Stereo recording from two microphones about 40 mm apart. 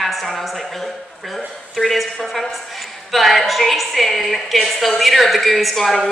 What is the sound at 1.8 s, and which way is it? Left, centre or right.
A woman's voice, centre.